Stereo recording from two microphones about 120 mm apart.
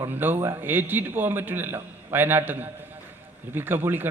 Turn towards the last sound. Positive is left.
turn(degrees=-15)  # may be behind; listen again after turning